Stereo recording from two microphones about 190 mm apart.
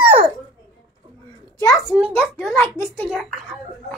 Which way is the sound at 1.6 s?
15° left (ahead or behind).